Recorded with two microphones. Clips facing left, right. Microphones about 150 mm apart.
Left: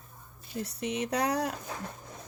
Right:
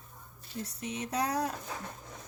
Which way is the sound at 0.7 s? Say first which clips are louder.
Left 3 dB; 70° left (ahead or behind).